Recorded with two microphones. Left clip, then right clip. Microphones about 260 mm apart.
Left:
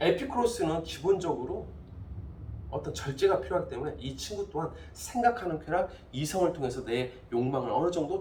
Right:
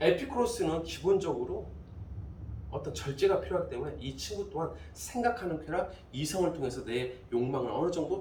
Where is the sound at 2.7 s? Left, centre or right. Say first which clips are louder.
Left 2 dB; centre.